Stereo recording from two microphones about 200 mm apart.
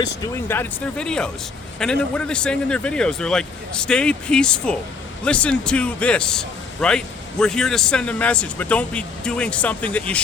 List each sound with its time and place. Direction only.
0.4 s speech: 10° left (ahead or behind)